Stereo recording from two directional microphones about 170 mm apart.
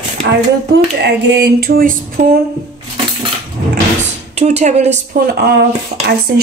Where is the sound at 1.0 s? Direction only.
90° right; by 2.0 s 60° right (ahead or behind).